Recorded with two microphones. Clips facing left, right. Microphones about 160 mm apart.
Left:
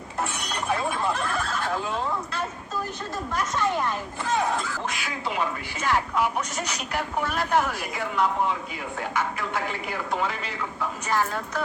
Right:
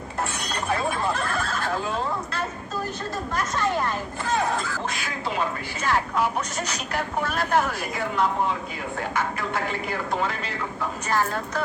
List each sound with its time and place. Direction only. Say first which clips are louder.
0.2 s chink: even; 15° left (ahead or behind)
3.3 s speech: even; 20° left (ahead or behind)
11.0 s speech: right 1 dB; 15° left (ahead or behind)